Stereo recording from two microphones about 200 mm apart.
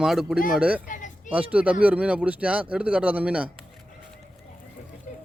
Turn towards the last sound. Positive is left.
turn(degrees=40)  # may be behind; listen again after turning